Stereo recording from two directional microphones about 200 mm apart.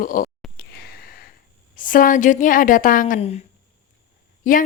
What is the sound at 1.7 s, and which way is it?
A woman's voice, 40° left (ahead or behind).